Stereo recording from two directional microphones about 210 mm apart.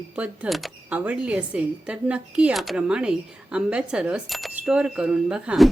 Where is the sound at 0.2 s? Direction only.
Centre (ahead or behind).